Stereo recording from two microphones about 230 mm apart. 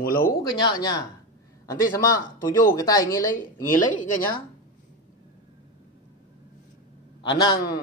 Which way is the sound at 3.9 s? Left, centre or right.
Left.